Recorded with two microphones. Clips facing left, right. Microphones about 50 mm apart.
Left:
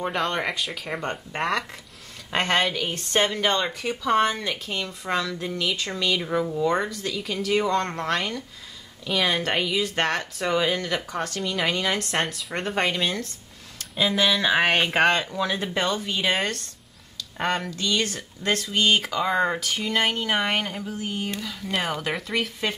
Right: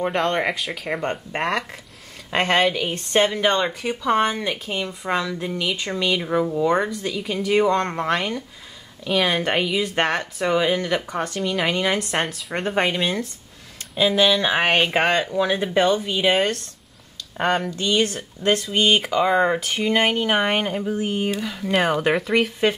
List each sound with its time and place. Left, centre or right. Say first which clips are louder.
0.0 s a woman's voice: right 4 dB; centre
17.7 s a woman's voice: right 5 dB; right